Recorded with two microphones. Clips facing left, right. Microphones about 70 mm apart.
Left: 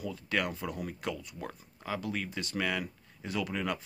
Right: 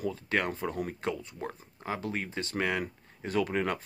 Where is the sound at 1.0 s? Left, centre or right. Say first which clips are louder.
Right 3 dB; right.